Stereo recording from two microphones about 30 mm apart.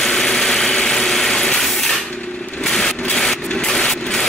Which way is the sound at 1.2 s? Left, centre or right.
Left.